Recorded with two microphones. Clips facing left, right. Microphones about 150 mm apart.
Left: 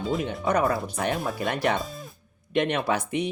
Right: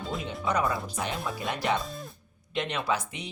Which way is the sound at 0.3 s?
55° left (ahead or behind).